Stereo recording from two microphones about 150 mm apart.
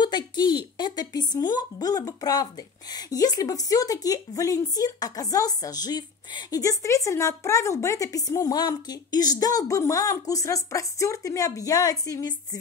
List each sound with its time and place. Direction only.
0.0 s speech: 30° left (ahead or behind)